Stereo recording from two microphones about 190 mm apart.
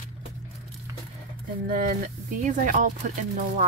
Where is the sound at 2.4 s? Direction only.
45° right (ahead or behind).